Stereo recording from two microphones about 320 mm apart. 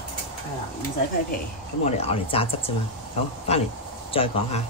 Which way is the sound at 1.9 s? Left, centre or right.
Centre.